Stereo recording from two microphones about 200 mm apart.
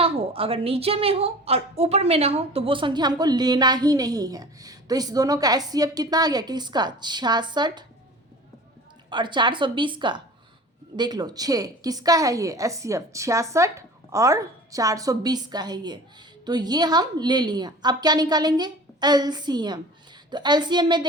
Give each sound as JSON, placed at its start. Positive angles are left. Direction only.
{"t": 0.0, "sound": "a woman's voice", "side_deg": -30}
{"t": 9.0, "sound": "a woman's voice", "side_deg": -25}